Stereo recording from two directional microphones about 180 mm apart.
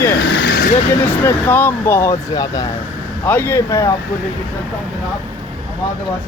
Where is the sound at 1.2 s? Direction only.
10° left (ahead or behind).